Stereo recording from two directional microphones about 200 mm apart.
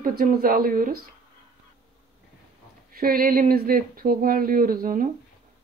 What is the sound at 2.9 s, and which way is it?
Speech, 45° right (ahead or behind).